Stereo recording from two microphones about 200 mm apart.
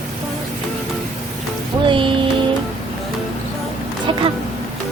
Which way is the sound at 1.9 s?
25° right (ahead or behind).